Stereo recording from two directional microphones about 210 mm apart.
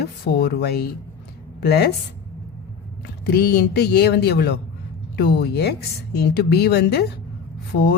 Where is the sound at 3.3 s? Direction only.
50° left (ahead or behind).